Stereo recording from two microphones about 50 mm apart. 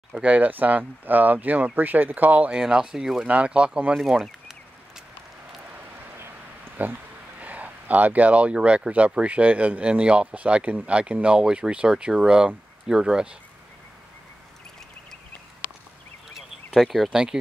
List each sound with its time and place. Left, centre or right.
0.1 s speech: right
2.5 s speech: centre
3.3 s speech: right
3.9 s speech: centre
6.1 s a sound: right
7.3 s a sound: right
8.5 s speech: right
16.3 s a sound: centre
17.1 s speech: centre